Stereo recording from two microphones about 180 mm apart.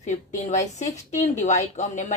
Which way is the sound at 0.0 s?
40° left (ahead or behind).